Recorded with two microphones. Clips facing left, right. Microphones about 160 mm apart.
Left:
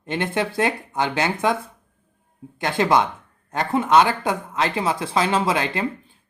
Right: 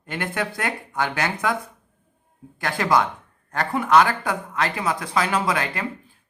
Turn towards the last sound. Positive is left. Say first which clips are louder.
# left 2 dB
turn(degrees=25)  # may be behind; listen again after turning